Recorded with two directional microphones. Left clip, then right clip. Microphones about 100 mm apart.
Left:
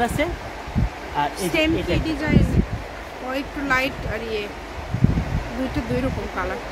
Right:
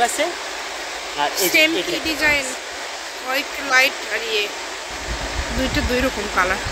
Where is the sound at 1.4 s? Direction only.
Centre (ahead or behind).